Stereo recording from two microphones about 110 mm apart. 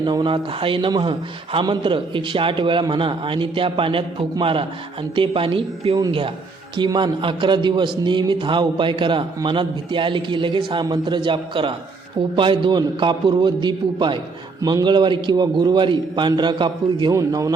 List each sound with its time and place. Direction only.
0.0 s a man's voice: 45° right (ahead or behind)
17.1 s a man's voice: 30° right (ahead or behind)